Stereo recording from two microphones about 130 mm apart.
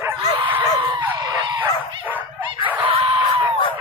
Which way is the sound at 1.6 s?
15° right (ahead or behind).